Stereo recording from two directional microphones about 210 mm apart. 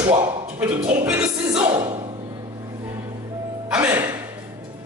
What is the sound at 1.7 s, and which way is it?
Music, 20° right (ahead or behind).